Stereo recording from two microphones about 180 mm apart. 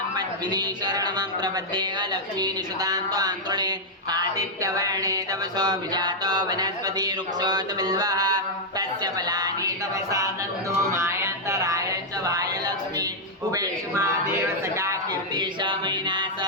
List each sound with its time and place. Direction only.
0.2 s speech: 25° right (ahead or behind)
10.8 s music: 15° right (ahead or behind)
13.5 s speech: 15° right (ahead or behind)
14.8 s a sound: 20° right (ahead or behind)